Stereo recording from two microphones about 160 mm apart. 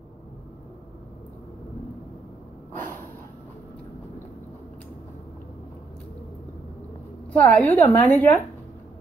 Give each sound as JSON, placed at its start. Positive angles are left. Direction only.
{"t": 7.3, "sound": "a woman's voice", "side_deg": 10}